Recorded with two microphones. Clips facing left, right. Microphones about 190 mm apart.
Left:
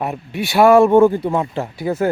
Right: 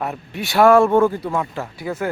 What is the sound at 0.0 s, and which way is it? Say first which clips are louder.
Speech: left 3 dB; 15° left (ahead or behind).